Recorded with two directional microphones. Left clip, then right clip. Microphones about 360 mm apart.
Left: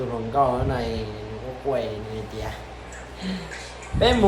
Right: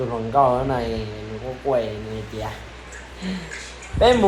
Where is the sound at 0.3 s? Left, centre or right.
Centre.